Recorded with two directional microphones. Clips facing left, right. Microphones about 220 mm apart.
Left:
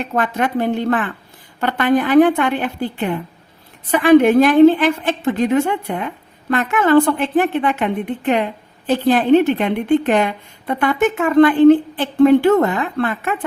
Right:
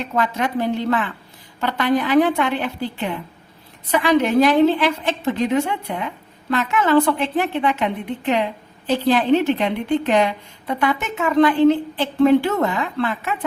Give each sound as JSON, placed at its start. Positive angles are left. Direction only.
{"t": 0.2, "sound": "a woman's voice", "side_deg": 50}